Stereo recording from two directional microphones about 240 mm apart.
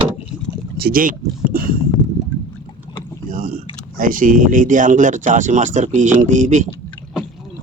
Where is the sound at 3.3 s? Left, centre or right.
Right.